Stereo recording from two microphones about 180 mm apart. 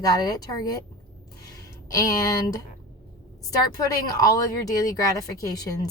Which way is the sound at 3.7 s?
20° left (ahead or behind).